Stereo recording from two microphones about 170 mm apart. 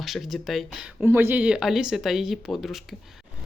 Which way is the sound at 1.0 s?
15° right (ahead or behind).